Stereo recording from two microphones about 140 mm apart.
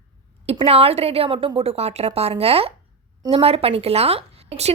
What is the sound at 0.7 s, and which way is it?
A woman's voice, 45° right (ahead or behind).